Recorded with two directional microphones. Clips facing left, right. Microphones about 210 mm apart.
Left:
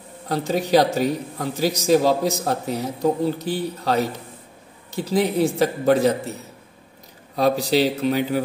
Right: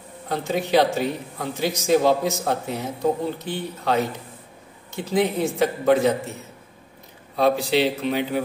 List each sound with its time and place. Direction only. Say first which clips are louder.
0.3 s speech: left 2 dB; 40° left (ahead or behind)
7.3 s speech: left 1 dB; 40° left (ahead or behind)